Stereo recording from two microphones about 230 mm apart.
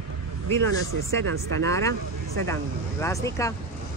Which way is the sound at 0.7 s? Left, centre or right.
Right.